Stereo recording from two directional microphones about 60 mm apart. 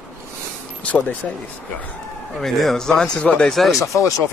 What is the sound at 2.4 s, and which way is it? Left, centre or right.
Speech, centre.